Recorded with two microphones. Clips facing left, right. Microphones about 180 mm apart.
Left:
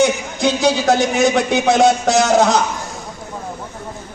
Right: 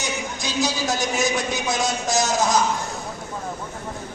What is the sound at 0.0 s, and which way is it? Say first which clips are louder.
A man's voice: left 13 dB; 60° left (ahead or behind).